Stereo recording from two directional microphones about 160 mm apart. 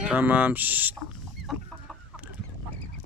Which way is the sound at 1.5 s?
Centre (ahead or behind).